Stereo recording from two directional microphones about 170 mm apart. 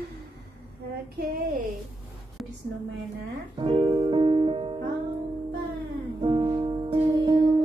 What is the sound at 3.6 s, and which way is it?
Music, 30° right (ahead or behind).